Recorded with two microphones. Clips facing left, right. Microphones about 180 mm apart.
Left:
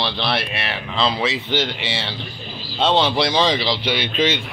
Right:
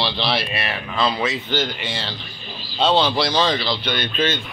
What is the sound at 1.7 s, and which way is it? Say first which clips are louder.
Speech: left 2 dB; 75° left (ahead or behind).